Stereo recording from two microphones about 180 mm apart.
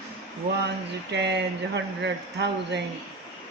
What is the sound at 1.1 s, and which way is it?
A man's voice, 70° right (ahead or behind).